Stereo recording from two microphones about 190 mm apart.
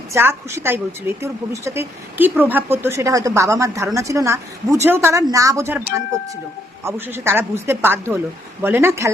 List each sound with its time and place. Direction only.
0.1 s a woman's voice: 10° right (ahead or behind)
6.8 s a woman's voice: 10° right (ahead or behind)